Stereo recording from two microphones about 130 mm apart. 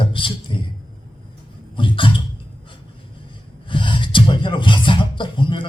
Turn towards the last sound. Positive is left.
turn(degrees=40)  # may be behind; listen again after turning